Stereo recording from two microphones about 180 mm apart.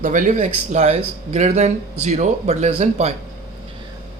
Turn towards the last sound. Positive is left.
turn(degrees=-40)  # may be behind; listen again after turning